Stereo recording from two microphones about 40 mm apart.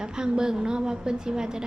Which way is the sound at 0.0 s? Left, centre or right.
Centre.